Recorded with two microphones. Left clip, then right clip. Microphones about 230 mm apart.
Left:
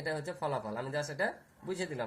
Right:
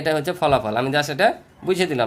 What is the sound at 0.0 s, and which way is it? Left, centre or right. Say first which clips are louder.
A man's voice: right 15 dB; right.